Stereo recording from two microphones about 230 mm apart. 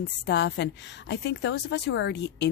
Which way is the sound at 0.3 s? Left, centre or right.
Left.